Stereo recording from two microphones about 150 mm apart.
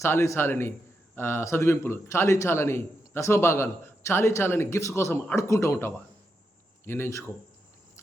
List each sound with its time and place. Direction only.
0.0 s a man's voice: 20° left (ahead or behind)